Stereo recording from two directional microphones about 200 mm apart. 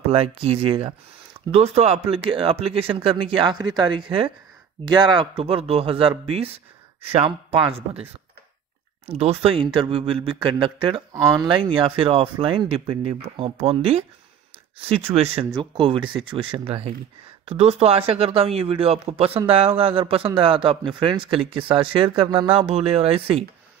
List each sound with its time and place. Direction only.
0.1 s speech: 30° right (ahead or behind)
9.0 s speech: 30° right (ahead or behind)